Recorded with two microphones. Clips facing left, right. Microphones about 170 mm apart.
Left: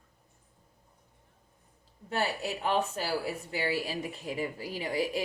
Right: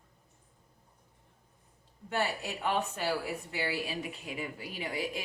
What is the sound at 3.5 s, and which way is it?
A woman's voice, 35° left (ahead or behind).